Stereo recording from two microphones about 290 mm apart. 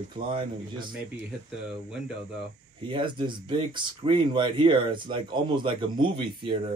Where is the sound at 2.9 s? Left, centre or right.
Centre.